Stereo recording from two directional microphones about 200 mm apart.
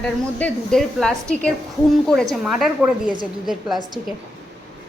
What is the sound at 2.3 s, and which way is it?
Speech, centre (ahead or behind).